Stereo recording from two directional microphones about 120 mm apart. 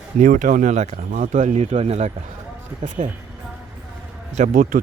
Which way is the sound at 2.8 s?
90° right.